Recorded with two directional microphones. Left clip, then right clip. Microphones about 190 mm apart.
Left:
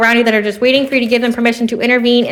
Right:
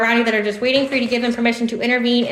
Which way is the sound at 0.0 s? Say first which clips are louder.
Left 5 dB; 40° left (ahead or behind).